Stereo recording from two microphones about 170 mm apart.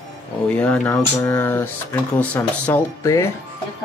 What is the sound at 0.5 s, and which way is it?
Speech, 5° left (ahead or behind).